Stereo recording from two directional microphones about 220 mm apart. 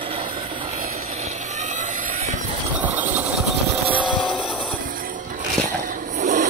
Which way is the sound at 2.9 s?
5° right (ahead or behind).